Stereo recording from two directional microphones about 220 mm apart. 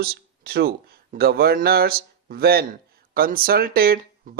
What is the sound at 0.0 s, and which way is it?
Speech, 45° right (ahead or behind).